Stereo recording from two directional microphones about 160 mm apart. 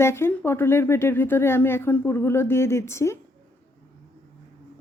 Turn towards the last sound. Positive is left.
turn(degrees=15)  # may be behind; listen again after turning